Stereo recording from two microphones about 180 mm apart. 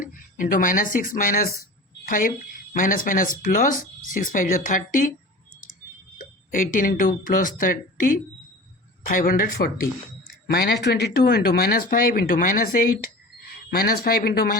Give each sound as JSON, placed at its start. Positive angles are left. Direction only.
{"t": 0.0, "sound": "speech", "side_deg": 50}
{"t": 6.1, "sound": "speech", "side_deg": 50}